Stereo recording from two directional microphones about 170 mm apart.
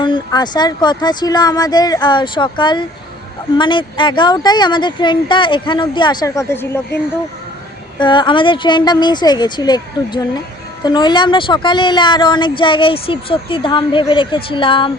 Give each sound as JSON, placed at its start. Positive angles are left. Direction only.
{"t": 0.0, "sound": "speech", "side_deg": 25}
{"t": 7.9, "sound": "speech", "side_deg": 25}